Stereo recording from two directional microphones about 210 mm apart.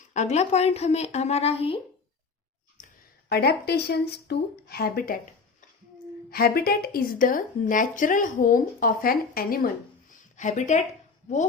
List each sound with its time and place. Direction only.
0.1 s a woman's voice: 35° left (ahead or behind)
3.2 s speech: 50° left (ahead or behind)
6.3 s speech: 45° left (ahead or behind)
10.1 s a sound: 35° left (ahead or behind)